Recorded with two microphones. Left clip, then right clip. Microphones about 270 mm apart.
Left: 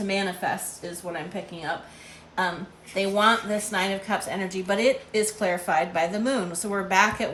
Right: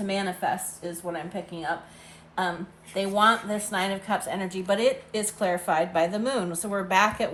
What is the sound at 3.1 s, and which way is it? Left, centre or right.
A woman's voice, centre.